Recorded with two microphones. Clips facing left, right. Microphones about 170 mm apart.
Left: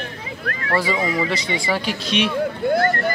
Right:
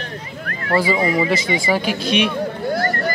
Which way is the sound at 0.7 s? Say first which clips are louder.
Right 4 dB; centre (ahead or behind).